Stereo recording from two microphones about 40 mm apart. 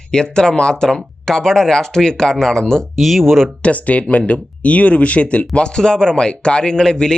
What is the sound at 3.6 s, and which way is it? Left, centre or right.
Speech, left.